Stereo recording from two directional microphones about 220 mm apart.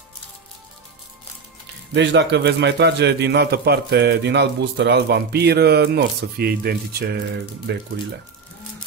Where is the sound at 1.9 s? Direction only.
50° right (ahead or behind).